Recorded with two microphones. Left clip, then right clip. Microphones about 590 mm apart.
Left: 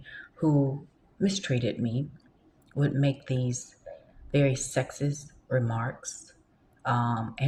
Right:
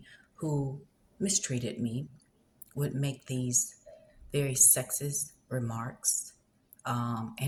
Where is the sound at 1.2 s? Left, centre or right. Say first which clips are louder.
Left 4 dB; right.